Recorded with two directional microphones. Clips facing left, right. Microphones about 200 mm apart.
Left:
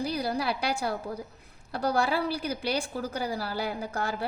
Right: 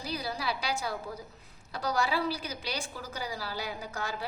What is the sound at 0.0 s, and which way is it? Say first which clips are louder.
A woman's voice: left 6 dB; 55° left (ahead or behind).